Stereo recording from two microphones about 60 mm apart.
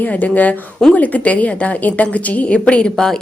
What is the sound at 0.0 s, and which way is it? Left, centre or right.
A woman's voice, left.